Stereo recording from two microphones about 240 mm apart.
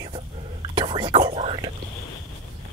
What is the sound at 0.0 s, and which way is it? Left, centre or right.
Whispering, centre.